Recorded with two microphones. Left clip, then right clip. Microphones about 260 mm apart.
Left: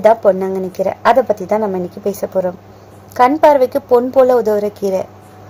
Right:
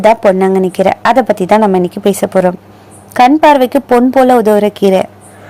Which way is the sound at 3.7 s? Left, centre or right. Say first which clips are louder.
Right 3 dB; right.